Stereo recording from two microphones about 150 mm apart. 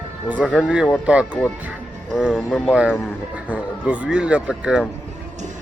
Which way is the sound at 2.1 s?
5° right (ahead or behind).